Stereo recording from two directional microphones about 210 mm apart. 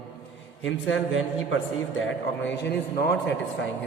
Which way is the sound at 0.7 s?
65° left (ahead or behind).